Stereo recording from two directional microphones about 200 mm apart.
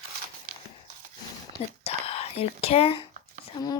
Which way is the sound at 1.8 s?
30° left (ahead or behind).